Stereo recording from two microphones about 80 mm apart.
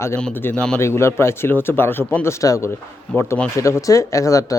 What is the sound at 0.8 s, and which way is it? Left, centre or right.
Speech, left.